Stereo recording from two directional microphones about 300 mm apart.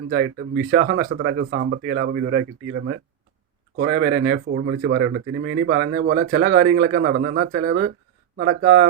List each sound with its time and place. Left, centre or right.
0.1 s speech: right
3.8 s speech: right